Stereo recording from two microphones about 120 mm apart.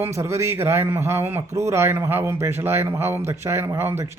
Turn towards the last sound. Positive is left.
turn(degrees=-20)  # may be behind; listen again after turning